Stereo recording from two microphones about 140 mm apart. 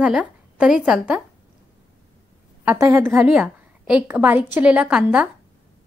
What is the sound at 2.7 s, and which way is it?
Speech, 20° right (ahead or behind).